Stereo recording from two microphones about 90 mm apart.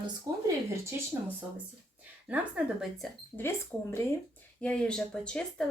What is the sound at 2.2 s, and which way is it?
Speech, 15° right (ahead or behind).